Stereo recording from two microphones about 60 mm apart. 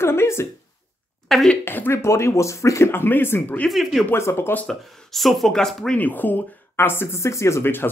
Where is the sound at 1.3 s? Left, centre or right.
Centre.